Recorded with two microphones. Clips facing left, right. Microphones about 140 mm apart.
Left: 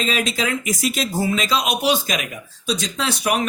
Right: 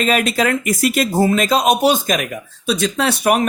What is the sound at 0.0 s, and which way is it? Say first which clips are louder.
Speech: right 6 dB; 55° right (ahead or behind).